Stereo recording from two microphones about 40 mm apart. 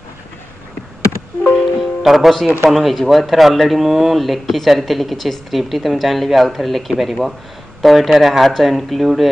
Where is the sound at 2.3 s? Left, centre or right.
Centre.